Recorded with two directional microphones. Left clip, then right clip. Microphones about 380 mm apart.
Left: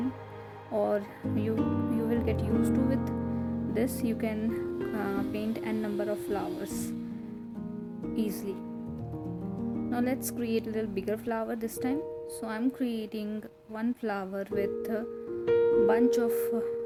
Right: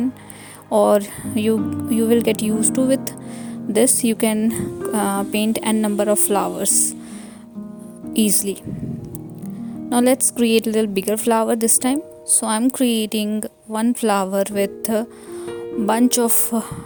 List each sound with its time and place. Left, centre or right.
0.7 s speech: right
8.1 s speech: right
9.9 s speech: right